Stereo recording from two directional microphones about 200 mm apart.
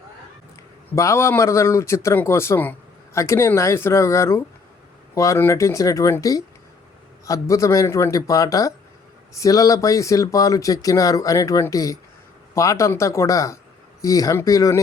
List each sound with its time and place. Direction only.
0.9 s a man's voice: 15° left (ahead or behind)